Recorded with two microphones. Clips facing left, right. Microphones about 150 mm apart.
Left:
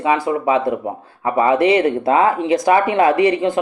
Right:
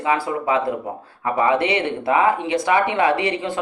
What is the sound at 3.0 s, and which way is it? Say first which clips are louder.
Speech: left 6 dB; 30° right (ahead or behind).